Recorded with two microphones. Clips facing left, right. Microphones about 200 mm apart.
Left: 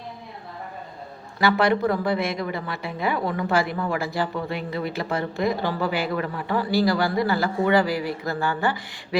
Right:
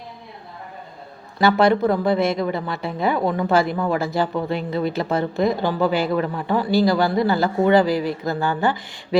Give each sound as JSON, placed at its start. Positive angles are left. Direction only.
{"t": 1.5, "sound": "a woman's voice", "side_deg": -25}